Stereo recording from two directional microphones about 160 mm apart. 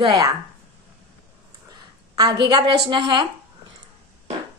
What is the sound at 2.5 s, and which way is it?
Speech, 30° right (ahead or behind).